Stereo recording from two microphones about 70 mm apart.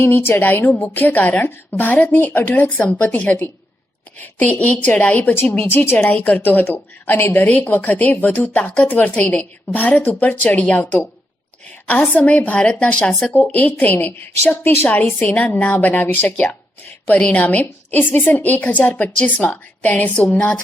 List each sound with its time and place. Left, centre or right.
0.0 s a woman's voice: left
5.3 s a woman's voice: left
12.1 s a woman's voice: left